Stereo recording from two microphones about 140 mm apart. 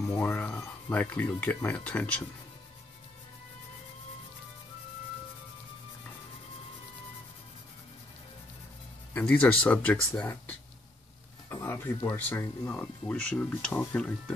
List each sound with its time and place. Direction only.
0.0 s speech: 15° left (ahead or behind)
9.1 s speech: 10° left (ahead or behind)
11.4 s a sound: 15° left (ahead or behind)
12.2 s speech: 15° left (ahead or behind)